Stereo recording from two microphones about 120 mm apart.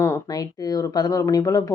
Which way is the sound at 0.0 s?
30° left (ahead or behind).